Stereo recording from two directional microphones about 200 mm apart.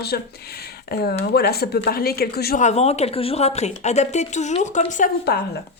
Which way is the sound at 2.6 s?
35° left (ahead or behind).